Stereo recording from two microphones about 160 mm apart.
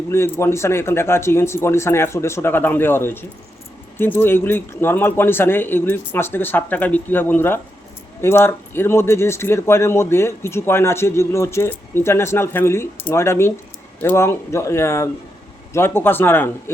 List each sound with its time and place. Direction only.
0.1 s speech: 15° left (ahead or behind)